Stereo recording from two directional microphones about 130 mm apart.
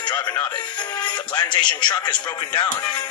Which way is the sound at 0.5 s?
35° left (ahead or behind).